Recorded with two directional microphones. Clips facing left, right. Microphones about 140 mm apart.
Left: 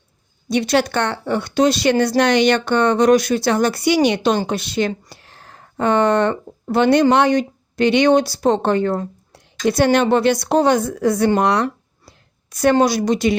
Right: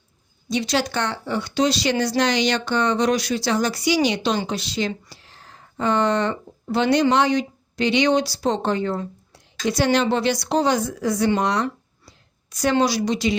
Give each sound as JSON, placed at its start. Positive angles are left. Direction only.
{"t": 0.4, "sound": "a woman's voice", "side_deg": 60}